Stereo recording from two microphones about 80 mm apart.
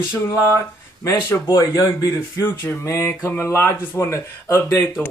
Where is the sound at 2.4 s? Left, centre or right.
Left.